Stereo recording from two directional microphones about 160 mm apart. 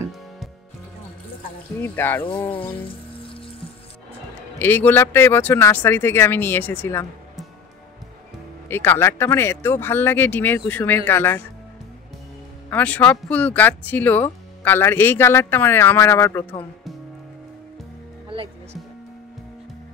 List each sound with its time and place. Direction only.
1.8 s speech: 15° left (ahead or behind)
4.6 s speech: 10° left (ahead or behind)
8.6 s speech: 15° left (ahead or behind)
12.6 s speech: 10° left (ahead or behind)
18.3 s music: 35° right (ahead or behind)